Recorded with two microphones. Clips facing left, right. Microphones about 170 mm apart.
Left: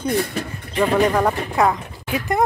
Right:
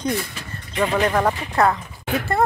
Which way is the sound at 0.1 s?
55° left (ahead or behind).